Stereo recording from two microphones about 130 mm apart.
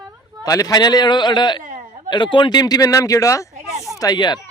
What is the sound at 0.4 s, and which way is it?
A man's voice, 30° left (ahead or behind).